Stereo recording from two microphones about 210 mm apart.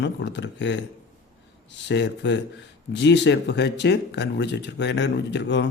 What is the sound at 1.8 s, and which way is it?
Speech, 55° left (ahead or behind).